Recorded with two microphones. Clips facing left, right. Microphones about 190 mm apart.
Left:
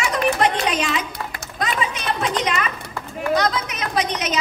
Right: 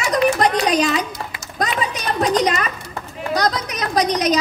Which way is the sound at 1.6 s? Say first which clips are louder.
Right 2 dB; 35° right (ahead or behind).